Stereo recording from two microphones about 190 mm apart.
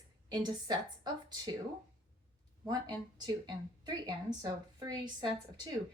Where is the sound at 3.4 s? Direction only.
20° right (ahead or behind).